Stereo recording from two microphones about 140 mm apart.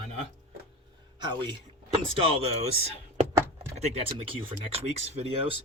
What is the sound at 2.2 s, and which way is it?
Speech, 45° right (ahead or behind).